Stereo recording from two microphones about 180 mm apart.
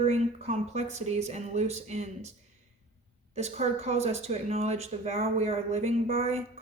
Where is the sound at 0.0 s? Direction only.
35° right (ahead or behind).